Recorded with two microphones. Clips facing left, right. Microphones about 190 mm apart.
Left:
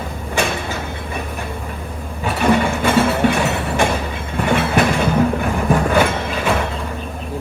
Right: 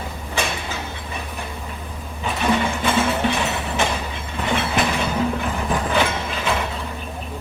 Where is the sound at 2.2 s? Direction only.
55° left (ahead or behind).